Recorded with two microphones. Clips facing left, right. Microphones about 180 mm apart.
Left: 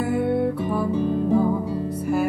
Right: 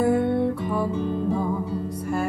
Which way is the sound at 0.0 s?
10° left (ahead or behind).